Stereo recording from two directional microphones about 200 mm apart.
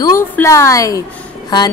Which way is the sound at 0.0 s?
15° left (ahead or behind).